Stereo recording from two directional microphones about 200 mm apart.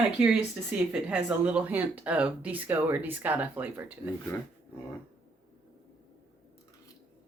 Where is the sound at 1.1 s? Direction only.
5° right (ahead or behind).